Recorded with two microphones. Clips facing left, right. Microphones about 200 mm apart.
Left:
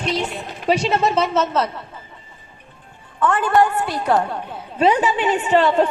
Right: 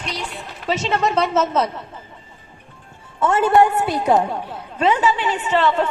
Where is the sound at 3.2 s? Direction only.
25° right (ahead or behind).